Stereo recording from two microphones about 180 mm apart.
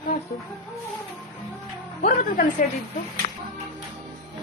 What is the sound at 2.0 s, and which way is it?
Speech, 50° left (ahead or behind).